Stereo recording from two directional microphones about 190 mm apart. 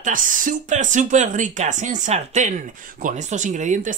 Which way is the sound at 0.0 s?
45° right (ahead or behind).